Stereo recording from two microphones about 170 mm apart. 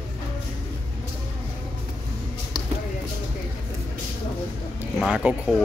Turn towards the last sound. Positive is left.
turn(degrees=0)  # may be behind; listen again after turning